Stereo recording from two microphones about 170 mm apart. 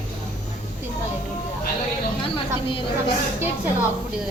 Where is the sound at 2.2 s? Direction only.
30° left (ahead or behind).